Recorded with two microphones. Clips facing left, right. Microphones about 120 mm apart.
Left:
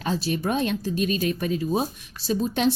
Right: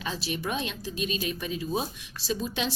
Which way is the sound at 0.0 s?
45° left (ahead or behind).